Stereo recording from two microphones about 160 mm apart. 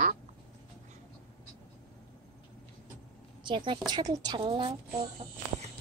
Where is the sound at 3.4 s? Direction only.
30° right (ahead or behind).